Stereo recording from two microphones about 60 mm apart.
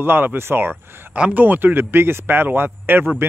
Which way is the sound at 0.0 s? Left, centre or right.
Right.